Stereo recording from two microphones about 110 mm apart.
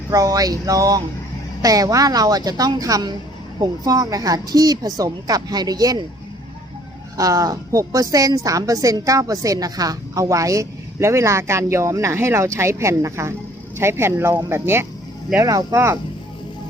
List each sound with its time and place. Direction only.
0.1 s a woman's voice: 30° right (ahead or behind)
7.2 s a woman's voice: 30° right (ahead or behind)
15.4 s a woman's voice: 35° right (ahead or behind)
15.7 s a woman's voice: 20° right (ahead or behind)